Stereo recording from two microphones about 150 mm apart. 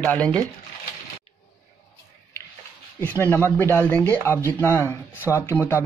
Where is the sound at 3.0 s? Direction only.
10° left (ahead or behind).